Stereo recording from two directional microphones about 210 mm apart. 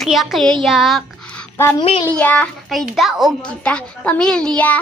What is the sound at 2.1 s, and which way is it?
A child's voice, 5° left (ahead or behind).